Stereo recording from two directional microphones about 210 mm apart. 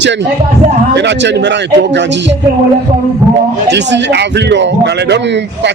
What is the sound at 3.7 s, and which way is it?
A man's voice, 55° right (ahead or behind).